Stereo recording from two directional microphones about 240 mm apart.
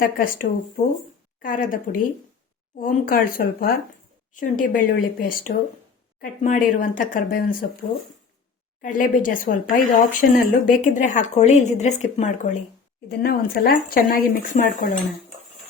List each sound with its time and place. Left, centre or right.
0.0 s speech: left
6.4 s speech: left